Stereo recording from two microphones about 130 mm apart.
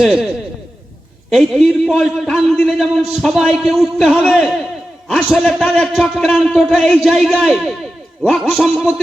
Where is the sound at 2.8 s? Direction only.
5° right (ahead or behind).